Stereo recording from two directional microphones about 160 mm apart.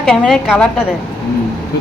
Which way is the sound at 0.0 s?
Centre (ahead or behind).